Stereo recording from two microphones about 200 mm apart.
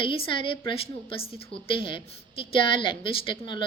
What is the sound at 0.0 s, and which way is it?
A woman's voice, 25° left (ahead or behind).